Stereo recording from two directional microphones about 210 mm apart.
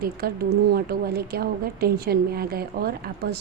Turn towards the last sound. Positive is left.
turn(degrees=-45)  # may be behind; listen again after turning